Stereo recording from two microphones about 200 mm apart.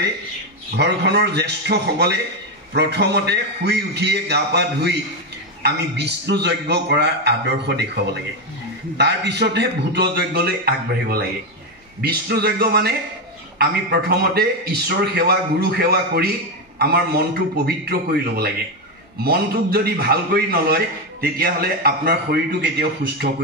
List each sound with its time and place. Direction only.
0.7 s a man's voice: 55° right (ahead or behind)
8.9 s a man's voice: 60° right (ahead or behind)